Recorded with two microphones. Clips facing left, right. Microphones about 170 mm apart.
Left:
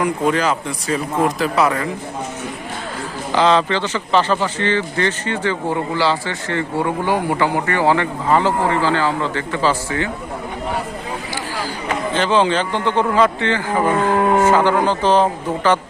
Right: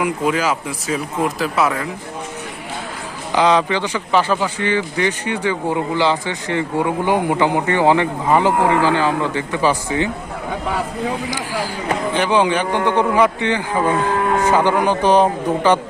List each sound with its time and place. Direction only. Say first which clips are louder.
0.0 s speech: left 1 dB; 5° right (ahead or behind)
3.3 s speech: even; 10° right (ahead or behind)
12.1 s speech: left 1 dB; 15° right (ahead or behind)
14.0 s speech: left 3 dB; 20° left (ahead or behind)
14.4 s speech: left 1 dB; 15° right (ahead or behind)